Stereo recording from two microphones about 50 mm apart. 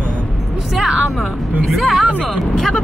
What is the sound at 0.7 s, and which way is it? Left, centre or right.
Speech, centre.